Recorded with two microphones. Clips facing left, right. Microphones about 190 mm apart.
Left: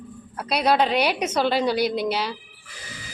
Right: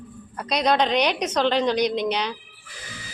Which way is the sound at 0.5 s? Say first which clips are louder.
Even; 5° left (ahead or behind).